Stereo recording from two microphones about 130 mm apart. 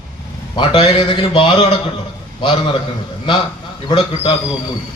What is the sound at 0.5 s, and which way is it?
A man's voice, 35° left (ahead or behind).